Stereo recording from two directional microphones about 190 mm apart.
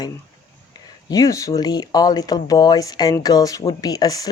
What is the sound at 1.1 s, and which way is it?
Speech, 15° left (ahead or behind).